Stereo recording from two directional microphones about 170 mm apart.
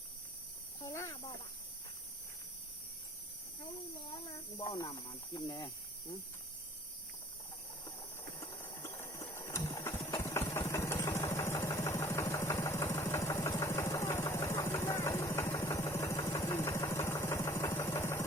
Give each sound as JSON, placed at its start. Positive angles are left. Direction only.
{"t": 0.9, "sound": "snake", "side_deg": 15}
{"t": 4.5, "sound": "speech", "side_deg": 20}
{"t": 8.4, "sound": "a sound", "side_deg": 15}
{"t": 10.2, "sound": "engine", "side_deg": 15}